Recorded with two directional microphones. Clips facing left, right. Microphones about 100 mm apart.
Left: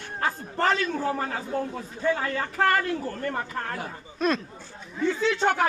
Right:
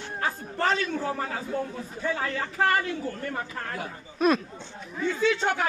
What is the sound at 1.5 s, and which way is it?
A man's voice, 45° left (ahead or behind).